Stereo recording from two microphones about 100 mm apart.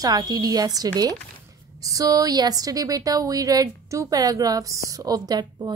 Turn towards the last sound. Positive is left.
turn(degrees=-40)  # may be behind; listen again after turning